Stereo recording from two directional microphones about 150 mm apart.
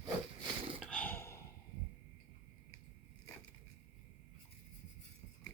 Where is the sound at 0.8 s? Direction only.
5° left (ahead or behind).